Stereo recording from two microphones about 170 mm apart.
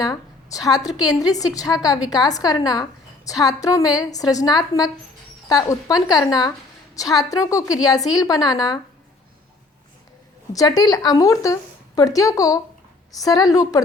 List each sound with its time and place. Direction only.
0.0 s a woman's voice: 20° left (ahead or behind)
10.5 s speech: 20° left (ahead or behind)